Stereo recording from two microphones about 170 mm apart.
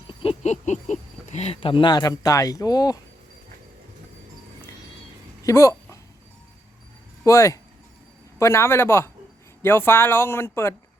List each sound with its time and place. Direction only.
0.1 s speech: 30° left (ahead or behind)
5.4 s a sound: 20° left (ahead or behind)
7.3 s speech: 20° left (ahead or behind)